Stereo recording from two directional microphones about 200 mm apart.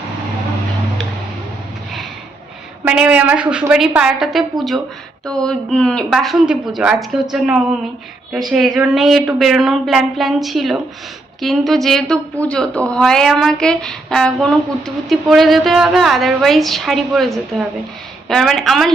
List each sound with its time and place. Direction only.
2.8 s a woman's voice: 10° right (ahead or behind)